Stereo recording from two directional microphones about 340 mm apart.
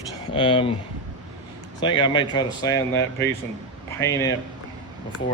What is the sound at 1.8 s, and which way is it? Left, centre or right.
Speech, centre.